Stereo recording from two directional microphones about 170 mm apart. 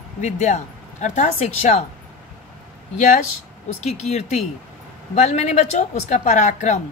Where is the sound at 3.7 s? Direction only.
45° left (ahead or behind).